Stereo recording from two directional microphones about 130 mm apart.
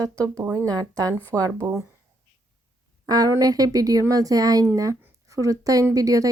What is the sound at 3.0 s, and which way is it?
A woman's voice, 30° right (ahead or behind).